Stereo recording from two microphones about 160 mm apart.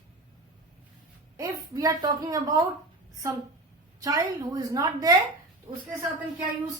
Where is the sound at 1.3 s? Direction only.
20° right (ahead or behind).